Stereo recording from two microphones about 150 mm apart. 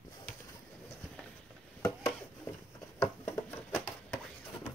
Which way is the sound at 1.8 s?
15° left (ahead or behind).